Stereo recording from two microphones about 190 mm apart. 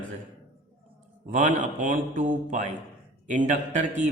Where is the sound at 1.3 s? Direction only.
40° right (ahead or behind).